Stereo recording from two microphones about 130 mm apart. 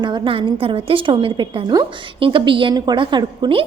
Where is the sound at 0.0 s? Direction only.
40° right (ahead or behind).